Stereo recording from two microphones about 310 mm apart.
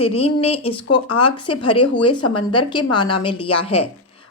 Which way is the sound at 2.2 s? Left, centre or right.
Left.